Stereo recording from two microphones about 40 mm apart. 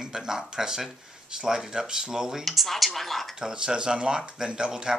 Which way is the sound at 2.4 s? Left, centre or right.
Centre.